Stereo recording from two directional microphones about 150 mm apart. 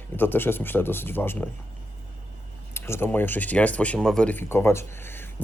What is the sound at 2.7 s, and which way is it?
Speech, 15° left (ahead or behind).